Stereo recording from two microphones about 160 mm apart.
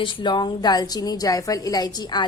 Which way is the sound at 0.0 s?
30° left (ahead or behind).